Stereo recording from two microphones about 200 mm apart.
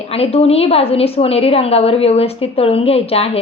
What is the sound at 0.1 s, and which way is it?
A woman's voice, 30° left (ahead or behind).